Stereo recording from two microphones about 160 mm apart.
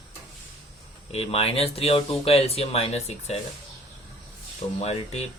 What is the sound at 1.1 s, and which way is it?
Speech, 40° left (ahead or behind).